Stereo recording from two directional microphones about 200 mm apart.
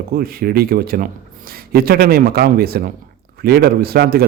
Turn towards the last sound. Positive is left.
turn(degrees=-50)  # may be behind; listen again after turning